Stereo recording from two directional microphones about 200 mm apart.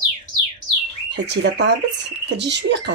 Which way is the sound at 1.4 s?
60° right (ahead or behind).